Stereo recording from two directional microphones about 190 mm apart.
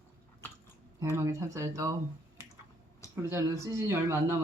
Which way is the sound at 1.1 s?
15° right (ahead or behind).